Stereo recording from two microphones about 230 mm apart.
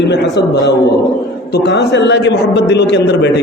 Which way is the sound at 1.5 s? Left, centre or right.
Left.